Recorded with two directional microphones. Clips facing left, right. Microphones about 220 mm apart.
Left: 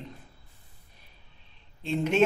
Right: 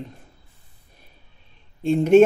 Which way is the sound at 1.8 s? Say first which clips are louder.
Right 11 dB; 50° right (ahead or behind).